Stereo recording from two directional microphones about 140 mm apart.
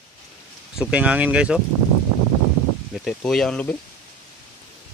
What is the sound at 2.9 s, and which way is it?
Speech, 5° left (ahead or behind).